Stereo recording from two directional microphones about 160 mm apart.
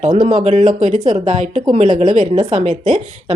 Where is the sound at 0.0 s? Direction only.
40° right (ahead or behind).